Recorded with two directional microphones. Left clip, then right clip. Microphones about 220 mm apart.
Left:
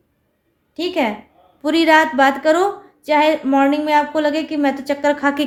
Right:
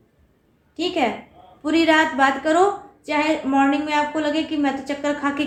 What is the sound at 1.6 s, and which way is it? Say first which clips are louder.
A woman's voice: left 4 dB; 45° left (ahead or behind).